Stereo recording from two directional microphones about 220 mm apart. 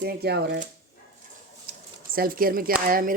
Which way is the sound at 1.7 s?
40° right (ahead or behind).